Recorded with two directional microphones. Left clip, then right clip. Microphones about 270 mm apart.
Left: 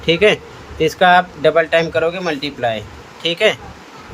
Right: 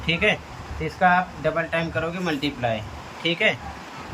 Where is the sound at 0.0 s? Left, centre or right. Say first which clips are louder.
Left 9 dB; centre.